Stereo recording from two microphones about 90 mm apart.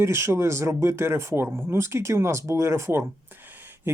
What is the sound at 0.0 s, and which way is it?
Speech, 30° right (ahead or behind).